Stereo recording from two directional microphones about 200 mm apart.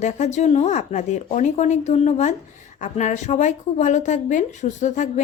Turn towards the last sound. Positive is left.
turn(degrees=40)  # may be behind; listen again after turning